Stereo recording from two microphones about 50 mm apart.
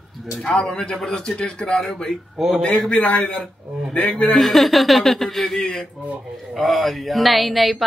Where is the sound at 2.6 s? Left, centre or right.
Left.